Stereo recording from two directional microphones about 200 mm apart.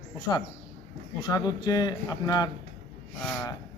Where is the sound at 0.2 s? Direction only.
20° left (ahead or behind).